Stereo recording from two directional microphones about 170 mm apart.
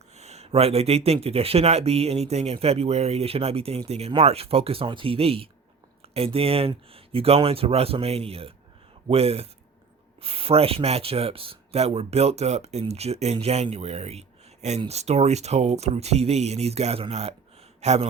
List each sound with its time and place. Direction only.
0.2 s speech: 40° right (ahead or behind)